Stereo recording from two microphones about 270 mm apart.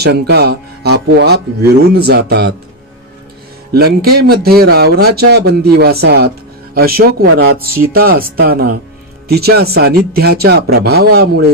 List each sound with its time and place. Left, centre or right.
0.0 s speech: right
3.8 s speech: right